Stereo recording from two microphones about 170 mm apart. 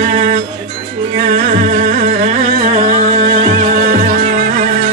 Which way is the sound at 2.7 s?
40° right (ahead or behind).